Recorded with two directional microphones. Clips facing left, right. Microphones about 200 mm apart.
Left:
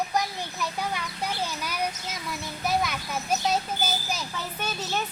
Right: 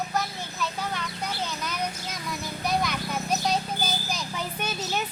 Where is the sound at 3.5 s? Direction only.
5° left (ahead or behind).